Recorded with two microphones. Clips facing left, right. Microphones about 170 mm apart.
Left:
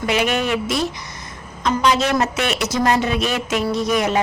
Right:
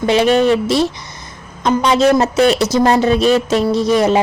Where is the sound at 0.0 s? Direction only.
30° right (ahead or behind).